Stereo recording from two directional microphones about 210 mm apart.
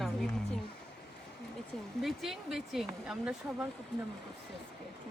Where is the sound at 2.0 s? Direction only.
Centre (ahead or behind).